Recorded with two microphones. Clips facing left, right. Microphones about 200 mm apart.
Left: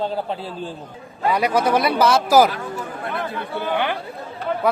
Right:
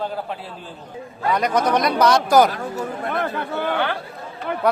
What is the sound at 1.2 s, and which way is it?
A man's voice, 10° left (ahead or behind).